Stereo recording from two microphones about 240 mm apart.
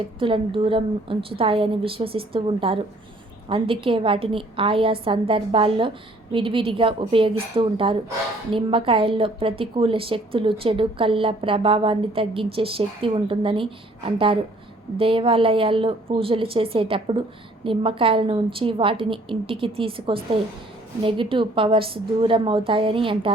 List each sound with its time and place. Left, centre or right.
0.2 s a woman's voice: right